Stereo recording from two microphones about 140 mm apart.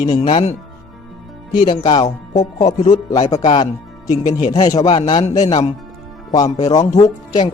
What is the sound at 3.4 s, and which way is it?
Speech, 40° left (ahead or behind).